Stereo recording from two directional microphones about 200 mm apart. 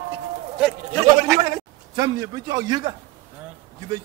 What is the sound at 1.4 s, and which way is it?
A man's voice, 20° right (ahead or behind).